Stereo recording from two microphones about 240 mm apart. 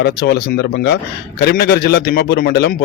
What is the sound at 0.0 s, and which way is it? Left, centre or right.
Speech, left.